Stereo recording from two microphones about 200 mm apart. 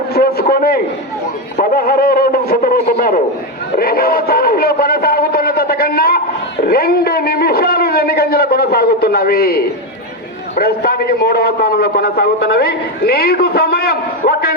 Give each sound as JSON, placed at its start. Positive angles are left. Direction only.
{"t": 0.1, "sound": "a sound", "side_deg": 50}
{"t": 3.8, "sound": "music", "side_deg": 50}
{"t": 6.7, "sound": "a man's voice", "side_deg": 50}